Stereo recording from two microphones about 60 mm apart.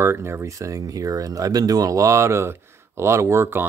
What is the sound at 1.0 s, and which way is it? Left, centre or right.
Speech, right.